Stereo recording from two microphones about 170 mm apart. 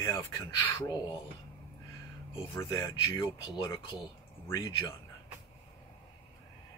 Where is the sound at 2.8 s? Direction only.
20° left (ahead or behind).